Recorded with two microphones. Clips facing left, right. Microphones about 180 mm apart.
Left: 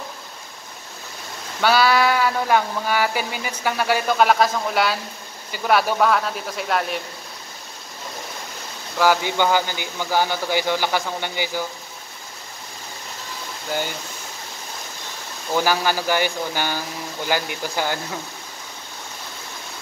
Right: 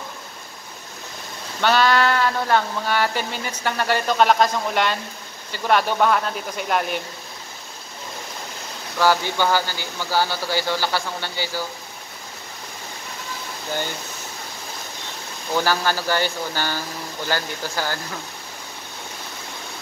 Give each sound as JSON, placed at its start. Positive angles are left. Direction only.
{"t": 1.6, "sound": "speech", "side_deg": 10}
{"t": 8.9, "sound": "speech", "side_deg": 10}
{"t": 15.5, "sound": "speech", "side_deg": 10}